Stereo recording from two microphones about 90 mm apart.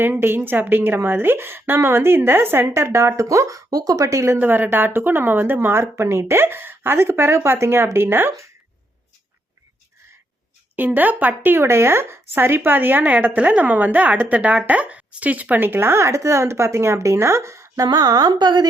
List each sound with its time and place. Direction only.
0.0 s a woman's voice: 25° right (ahead or behind)
4.4 s a woman's voice: 20° right (ahead or behind)
10.8 s a woman's voice: 20° right (ahead or behind)
17.8 s a woman's voice: 45° right (ahead or behind)